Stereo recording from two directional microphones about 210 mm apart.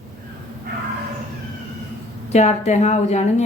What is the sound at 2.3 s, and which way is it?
A woman's voice, 30° left (ahead or behind).